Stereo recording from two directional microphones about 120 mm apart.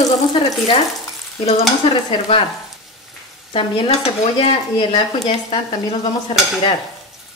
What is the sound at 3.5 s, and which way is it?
Speech, 50° left (ahead or behind).